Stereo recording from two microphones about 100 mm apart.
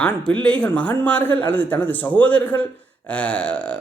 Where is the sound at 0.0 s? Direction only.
10° left (ahead or behind).